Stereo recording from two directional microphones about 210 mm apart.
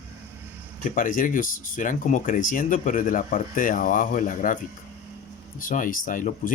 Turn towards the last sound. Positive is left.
turn(degrees=40)  # may be behind; listen again after turning